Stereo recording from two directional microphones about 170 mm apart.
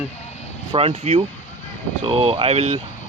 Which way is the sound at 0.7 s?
35° right (ahead or behind).